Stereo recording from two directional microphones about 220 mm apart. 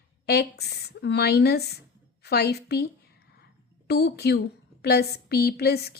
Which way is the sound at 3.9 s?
45° left (ahead or behind).